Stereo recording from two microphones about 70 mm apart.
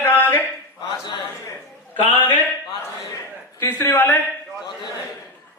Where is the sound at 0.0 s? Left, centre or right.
Left.